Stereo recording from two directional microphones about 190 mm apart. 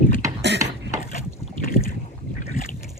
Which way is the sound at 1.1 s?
45° left (ahead or behind).